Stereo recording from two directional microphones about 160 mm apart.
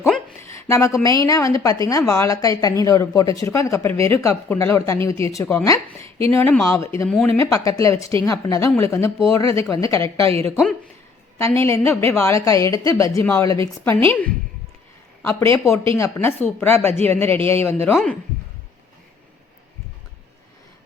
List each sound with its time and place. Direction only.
0.4 s a woman's voice: 20° left (ahead or behind)
11.3 s a woman's voice: 15° left (ahead or behind)